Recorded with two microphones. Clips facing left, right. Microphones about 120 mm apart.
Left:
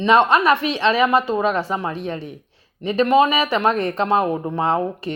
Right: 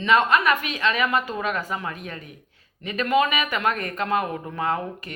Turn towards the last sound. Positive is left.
turn(degrees=25)  # may be behind; listen again after turning